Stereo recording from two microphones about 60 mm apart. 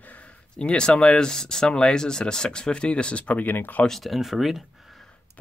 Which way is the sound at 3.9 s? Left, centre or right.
Centre.